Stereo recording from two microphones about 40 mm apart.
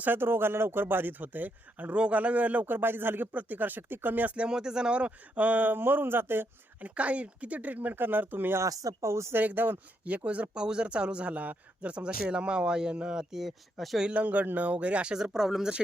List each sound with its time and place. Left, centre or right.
0.0 s speech: right
3.3 s speech: right
4.4 s speech: centre; by 6.5 s right
6.8 s speech: right
10.1 s speech: right
10.5 s a man's voice: right; by 14.0 s centre
14.1 s speech: right
15.1 s speech: centre
15.4 s speech: centre